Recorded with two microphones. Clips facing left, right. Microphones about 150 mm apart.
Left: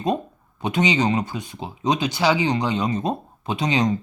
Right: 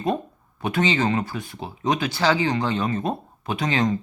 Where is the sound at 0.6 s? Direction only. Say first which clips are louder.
Left 1 dB; 20° left (ahead or behind).